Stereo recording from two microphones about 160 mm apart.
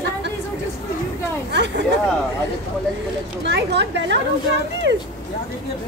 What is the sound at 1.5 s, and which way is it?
Speech, 90° right.